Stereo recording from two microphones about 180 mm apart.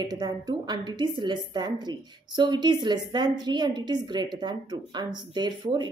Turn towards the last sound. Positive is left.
turn(degrees=-25)  # may be behind; listen again after turning